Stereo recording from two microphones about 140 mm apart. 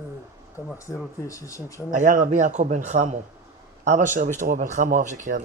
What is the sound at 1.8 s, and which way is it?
A man's voice, 65° right (ahead or behind).